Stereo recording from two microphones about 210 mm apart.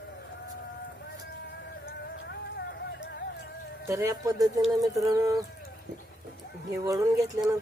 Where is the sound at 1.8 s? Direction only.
50° left (ahead or behind).